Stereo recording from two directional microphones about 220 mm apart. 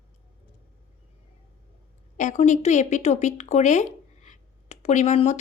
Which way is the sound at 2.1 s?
35° left (ahead or behind).